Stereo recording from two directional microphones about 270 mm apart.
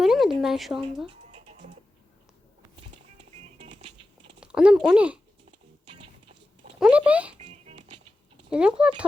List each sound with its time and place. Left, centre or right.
0.0 s a sound: centre
1.3 s music: right
3.2 s music: right
4.4 s speech: centre
5.5 s music: centre
6.7 s speech: centre
7.3 s music: right
8.4 s speech: centre